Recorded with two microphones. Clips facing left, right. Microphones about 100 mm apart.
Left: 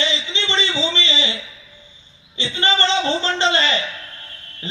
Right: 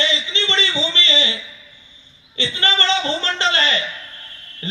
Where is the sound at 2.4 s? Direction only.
25° left (ahead or behind).